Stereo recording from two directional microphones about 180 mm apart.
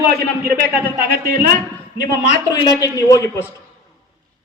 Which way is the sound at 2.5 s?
20° left (ahead or behind).